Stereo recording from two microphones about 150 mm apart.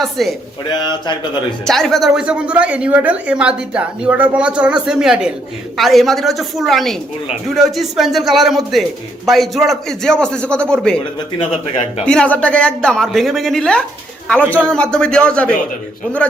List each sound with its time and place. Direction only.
0.0 s speech: centre (ahead or behind)
0.7 s speech: 30° left (ahead or behind)
1.6 s speech: centre (ahead or behind)
11.3 s speech: 40° left (ahead or behind)
12.0 s speech: 10° left (ahead or behind)